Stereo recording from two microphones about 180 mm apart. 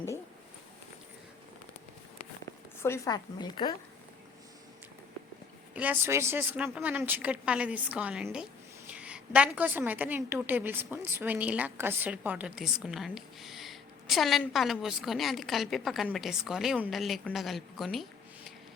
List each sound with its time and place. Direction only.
2.8 s a woman's voice: 15° left (ahead or behind)
5.7 s a woman's voice: 10° right (ahead or behind)